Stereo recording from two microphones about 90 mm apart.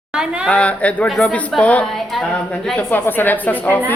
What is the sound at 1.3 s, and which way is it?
Speech, 15° left (ahead or behind).